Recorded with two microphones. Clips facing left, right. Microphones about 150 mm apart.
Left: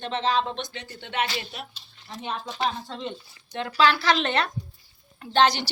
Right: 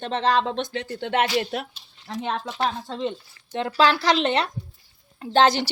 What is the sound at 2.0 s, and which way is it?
Speech, 90° right.